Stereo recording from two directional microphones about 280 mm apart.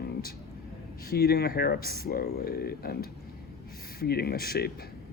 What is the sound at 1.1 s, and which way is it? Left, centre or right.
Speech, left.